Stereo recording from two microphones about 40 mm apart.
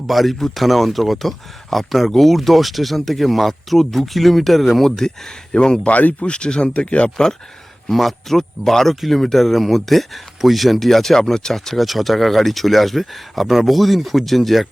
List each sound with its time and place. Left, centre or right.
0.1 s speech: centre
5.8 s speech: left
6.2 s speech: left
7.9 s speech: centre